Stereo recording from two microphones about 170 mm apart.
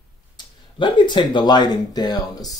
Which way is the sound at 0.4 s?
25° left (ahead or behind).